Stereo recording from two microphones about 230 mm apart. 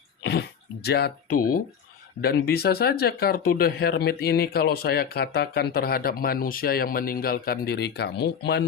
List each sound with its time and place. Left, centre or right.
0.2 s speech: left